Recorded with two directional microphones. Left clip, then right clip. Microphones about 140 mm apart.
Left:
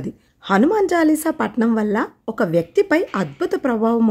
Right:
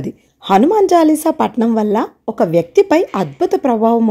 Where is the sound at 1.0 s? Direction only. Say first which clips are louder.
Right 5 dB; 30° left (ahead or behind).